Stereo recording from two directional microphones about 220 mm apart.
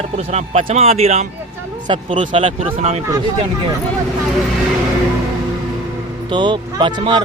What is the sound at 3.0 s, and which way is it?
Speech, 15° right (ahead or behind).